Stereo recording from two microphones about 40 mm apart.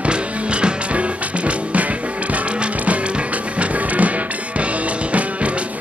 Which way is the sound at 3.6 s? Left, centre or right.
Right.